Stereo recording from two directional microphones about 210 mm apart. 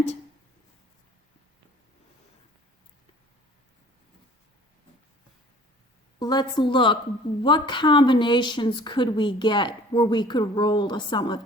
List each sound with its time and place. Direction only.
6.1 s speech: 20° left (ahead or behind)